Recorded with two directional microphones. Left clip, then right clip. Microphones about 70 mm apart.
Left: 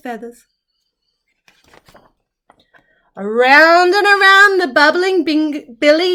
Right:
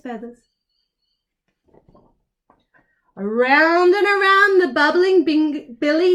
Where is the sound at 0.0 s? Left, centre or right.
Left.